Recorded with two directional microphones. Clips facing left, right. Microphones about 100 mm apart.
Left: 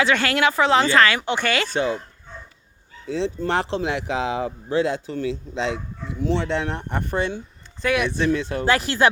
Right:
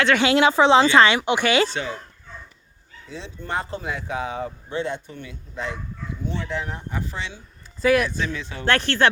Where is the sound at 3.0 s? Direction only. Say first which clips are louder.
Left 9 dB; 80° left; by 7.4 s 50° left (ahead or behind).